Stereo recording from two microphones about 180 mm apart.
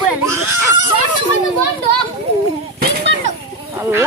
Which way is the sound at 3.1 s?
90° right.